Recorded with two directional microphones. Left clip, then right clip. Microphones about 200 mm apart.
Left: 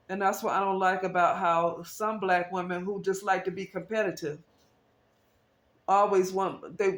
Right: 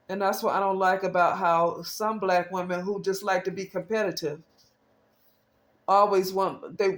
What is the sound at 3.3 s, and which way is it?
Speech, 40° right (ahead or behind).